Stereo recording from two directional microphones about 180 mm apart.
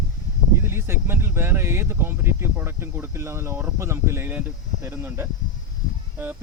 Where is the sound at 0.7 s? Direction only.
15° right (ahead or behind).